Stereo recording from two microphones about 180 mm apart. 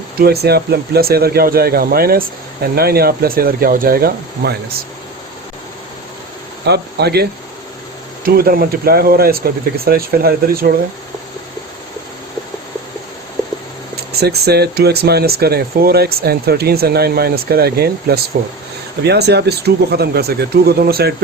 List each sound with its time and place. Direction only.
0.2 s speech: 60° right (ahead or behind)
6.7 s speech: 65° right (ahead or behind)
13.9 s speech: 60° right (ahead or behind)